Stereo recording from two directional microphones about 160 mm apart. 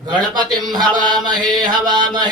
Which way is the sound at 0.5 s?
25° right (ahead or behind).